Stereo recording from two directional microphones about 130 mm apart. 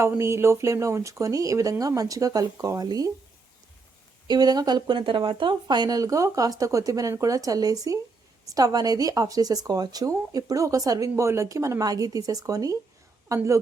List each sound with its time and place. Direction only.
0.2 s speech: 20° right (ahead or behind)
4.3 s a woman's voice: 30° right (ahead or behind)